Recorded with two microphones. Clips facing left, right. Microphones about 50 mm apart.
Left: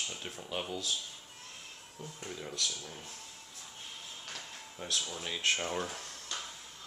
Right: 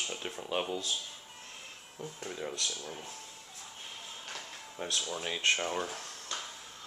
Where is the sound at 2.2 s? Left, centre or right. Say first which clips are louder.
Right 1 dB; centre.